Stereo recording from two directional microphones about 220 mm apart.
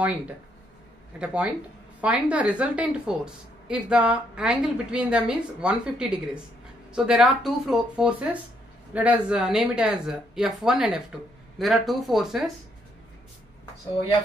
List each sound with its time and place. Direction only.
1.2 s a woman's voice: 5° right (ahead or behind)